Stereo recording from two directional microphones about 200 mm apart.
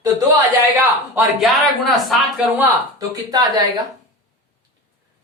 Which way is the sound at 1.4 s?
Centre (ahead or behind).